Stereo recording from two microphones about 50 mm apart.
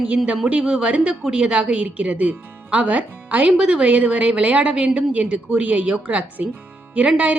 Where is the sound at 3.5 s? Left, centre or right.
Right.